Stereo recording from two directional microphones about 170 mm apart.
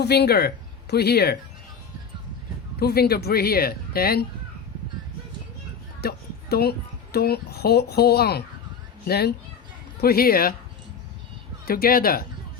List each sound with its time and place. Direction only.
0.0 s speech: 75° left (ahead or behind)
2.7 s speech: 65° left (ahead or behind)
6.0 s speech: 65° left (ahead or behind)
11.6 s speech: 60° left (ahead or behind)